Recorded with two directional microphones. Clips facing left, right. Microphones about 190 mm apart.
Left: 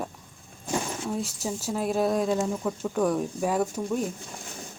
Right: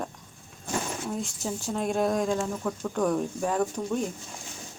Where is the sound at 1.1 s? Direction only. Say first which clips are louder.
Left 3 dB; 5° left (ahead or behind).